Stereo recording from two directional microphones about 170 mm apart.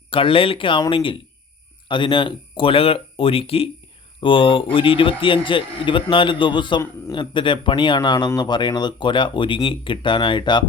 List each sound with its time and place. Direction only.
0.1 s speech: 30° left (ahead or behind)